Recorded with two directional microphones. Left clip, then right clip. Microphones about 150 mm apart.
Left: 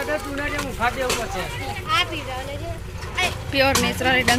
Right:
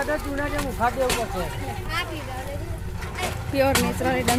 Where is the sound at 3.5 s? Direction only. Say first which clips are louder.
Left 2 dB; 20° right (ahead or behind).